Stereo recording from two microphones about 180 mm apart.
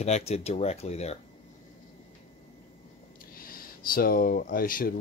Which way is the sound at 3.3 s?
55° left (ahead or behind).